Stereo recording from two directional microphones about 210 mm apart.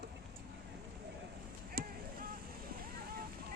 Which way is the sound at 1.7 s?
45° right (ahead or behind).